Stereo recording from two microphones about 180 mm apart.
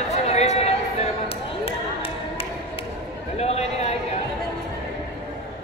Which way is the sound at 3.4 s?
35° left (ahead or behind).